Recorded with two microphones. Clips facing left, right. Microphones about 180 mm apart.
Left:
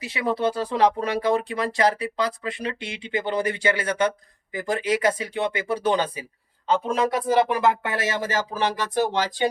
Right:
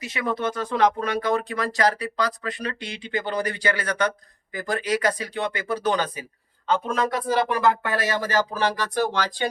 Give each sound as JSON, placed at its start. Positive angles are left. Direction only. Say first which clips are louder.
{"t": 0.0, "sound": "speech", "louder": "left 2 dB", "side_deg": 30}